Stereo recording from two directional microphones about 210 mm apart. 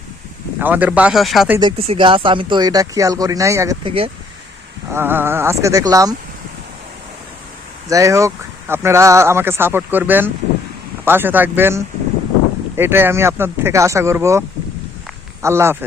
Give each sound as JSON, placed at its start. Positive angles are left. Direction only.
{"t": 0.6, "sound": "speech", "side_deg": -10}
{"t": 1.5, "sound": "speech", "side_deg": -25}
{"t": 7.9, "sound": "speech", "side_deg": -15}